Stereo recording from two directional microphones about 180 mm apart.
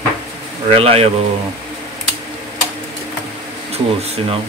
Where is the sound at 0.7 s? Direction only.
35° right (ahead or behind).